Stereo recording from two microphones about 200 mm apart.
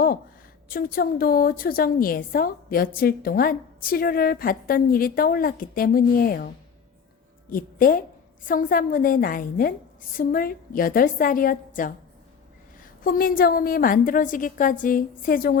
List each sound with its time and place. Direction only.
0.7 s a woman's voice: 50° left (ahead or behind)
7.5 s a woman's voice: 45° left (ahead or behind)